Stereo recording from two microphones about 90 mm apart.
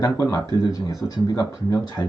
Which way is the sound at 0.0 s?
40° left (ahead or behind).